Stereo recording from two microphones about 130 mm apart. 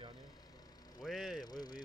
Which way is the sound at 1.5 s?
30° left (ahead or behind).